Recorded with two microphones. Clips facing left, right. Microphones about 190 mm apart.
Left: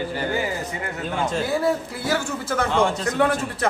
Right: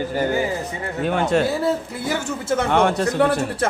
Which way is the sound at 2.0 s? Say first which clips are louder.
Even; 20° right (ahead or behind).